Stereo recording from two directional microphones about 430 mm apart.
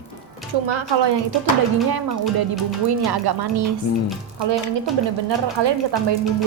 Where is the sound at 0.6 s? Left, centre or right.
Right.